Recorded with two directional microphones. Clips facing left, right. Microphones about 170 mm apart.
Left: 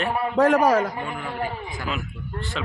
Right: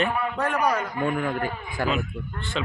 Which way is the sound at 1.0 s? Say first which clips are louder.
Right 6 dB; 45° right (ahead or behind).